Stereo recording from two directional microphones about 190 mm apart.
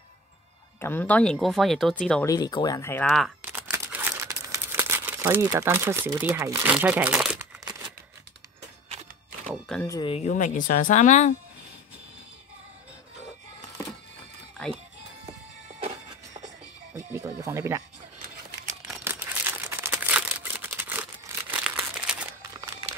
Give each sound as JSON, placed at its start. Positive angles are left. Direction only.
{"t": 0.7, "sound": "speech", "side_deg": 10}
{"t": 2.2, "sound": "speech", "side_deg": 20}
{"t": 3.4, "sound": "crumpling", "side_deg": -10}
{"t": 9.8, "sound": "speech", "side_deg": 25}
{"t": 15.2, "sound": "music", "side_deg": -30}
{"t": 16.9, "sound": "music", "side_deg": -15}
{"t": 18.9, "sound": "crumpling", "side_deg": -5}
{"t": 22.6, "sound": "crumpling", "side_deg": -15}